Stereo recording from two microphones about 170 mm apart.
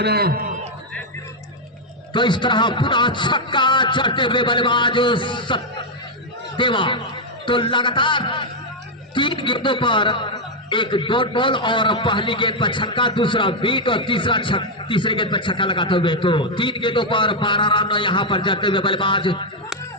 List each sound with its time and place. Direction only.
0.0 s a man's voice: 70° right (ahead or behind)
2.1 s a man's voice: 25° left (ahead or behind)